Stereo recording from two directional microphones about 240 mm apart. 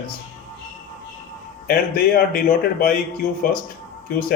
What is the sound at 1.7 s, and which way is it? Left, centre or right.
Speech, left.